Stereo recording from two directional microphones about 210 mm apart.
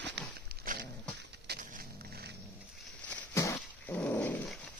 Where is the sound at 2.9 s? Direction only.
5° left (ahead or behind).